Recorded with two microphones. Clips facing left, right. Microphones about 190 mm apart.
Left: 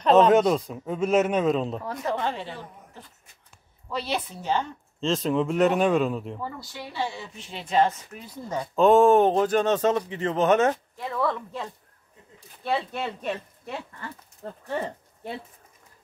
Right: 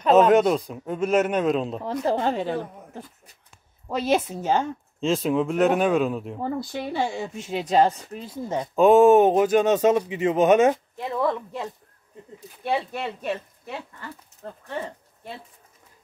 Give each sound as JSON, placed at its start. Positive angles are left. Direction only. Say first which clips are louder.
{"t": 0.0, "sound": "speech", "louder": "right 1 dB", "side_deg": -5}
{"t": 2.0, "sound": "speech", "louder": "right 6 dB", "side_deg": -35}
{"t": 5.0, "sound": "speech", "louder": "right 2 dB", "side_deg": -5}
{"t": 6.4, "sound": "speech", "louder": "right 8 dB", "side_deg": -50}
{"t": 8.7, "sound": "speech", "louder": "right 3 dB", "side_deg": -10}